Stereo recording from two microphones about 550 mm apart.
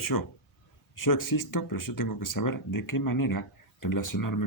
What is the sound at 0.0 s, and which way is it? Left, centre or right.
Speech, left.